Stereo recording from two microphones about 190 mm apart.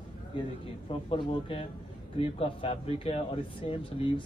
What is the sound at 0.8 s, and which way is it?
A man's voice, 30° left (ahead or behind).